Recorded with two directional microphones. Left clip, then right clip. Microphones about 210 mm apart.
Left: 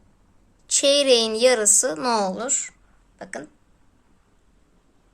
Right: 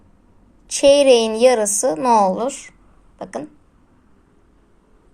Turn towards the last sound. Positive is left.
turn(degrees=0)  # may be behind; listen again after turning